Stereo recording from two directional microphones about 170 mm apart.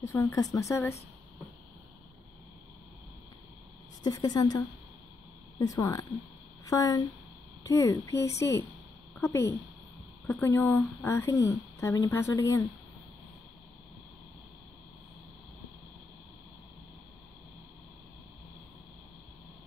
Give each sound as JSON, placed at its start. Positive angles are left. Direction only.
{"t": 0.0, "sound": "speech", "side_deg": 15}
{"t": 4.0, "sound": "a woman's voice", "side_deg": 20}